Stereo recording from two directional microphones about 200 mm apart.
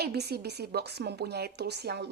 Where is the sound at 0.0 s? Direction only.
55° right (ahead or behind).